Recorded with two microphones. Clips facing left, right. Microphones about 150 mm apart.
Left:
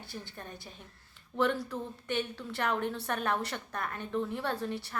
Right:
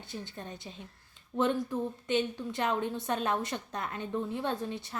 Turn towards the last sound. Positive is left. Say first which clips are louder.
# even
turn(degrees=-20)  # may be behind; listen again after turning